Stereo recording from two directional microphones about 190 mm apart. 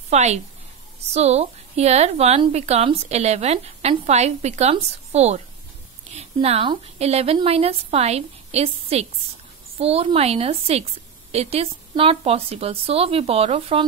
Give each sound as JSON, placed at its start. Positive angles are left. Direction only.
{"t": 0.1, "sound": "a woman's voice", "side_deg": -35}